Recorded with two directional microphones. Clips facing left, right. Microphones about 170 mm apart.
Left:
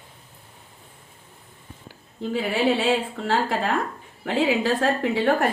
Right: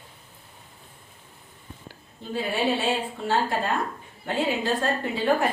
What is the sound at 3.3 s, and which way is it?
A woman's voice, 90° left.